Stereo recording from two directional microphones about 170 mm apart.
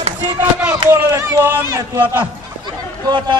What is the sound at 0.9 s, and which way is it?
Speech, 15° right (ahead or behind).